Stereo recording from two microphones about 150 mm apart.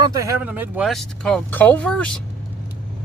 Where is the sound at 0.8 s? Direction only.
Centre (ahead or behind).